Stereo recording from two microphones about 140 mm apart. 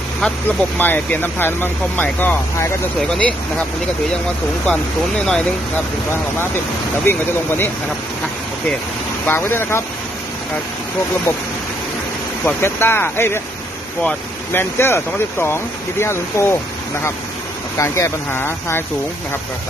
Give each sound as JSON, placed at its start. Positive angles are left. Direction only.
{"t": 0.2, "sound": "speech", "side_deg": 10}
{"t": 4.6, "sound": "speech", "side_deg": 10}
{"t": 7.0, "sound": "speech", "side_deg": 15}
{"t": 9.2, "sound": "speech", "side_deg": 15}
{"t": 12.5, "sound": "speech", "side_deg": 15}
{"t": 17.7, "sound": "speech", "side_deg": 20}